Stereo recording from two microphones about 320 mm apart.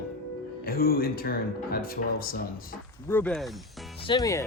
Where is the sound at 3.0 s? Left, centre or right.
Centre.